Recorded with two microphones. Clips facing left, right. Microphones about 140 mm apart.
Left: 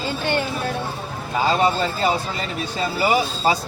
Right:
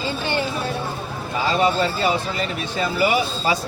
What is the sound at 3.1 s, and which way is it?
Speech, 35° left (ahead or behind).